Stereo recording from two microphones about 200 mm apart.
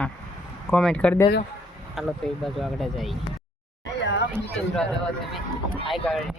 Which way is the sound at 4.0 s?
60° left (ahead or behind).